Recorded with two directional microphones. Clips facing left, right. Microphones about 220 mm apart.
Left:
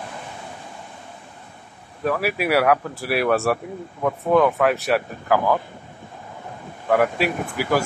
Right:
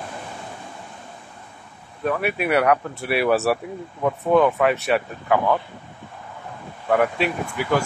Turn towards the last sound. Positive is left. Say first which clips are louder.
# left 1 dB
turn(degrees=5)  # may be behind; listen again after turning